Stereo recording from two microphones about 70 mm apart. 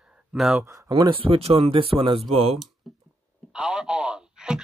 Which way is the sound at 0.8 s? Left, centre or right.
Right.